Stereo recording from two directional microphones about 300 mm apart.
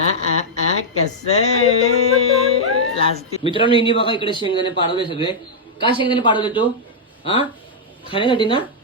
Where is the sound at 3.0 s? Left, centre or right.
Centre.